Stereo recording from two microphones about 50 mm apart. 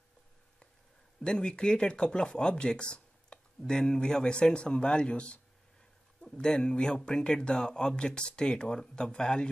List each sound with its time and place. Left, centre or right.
1.2 s speech: centre